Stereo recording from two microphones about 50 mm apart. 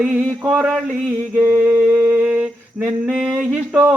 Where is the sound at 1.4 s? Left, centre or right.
Right.